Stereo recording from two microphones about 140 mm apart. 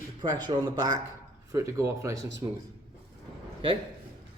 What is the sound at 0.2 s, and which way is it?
Speech, 30° right (ahead or behind).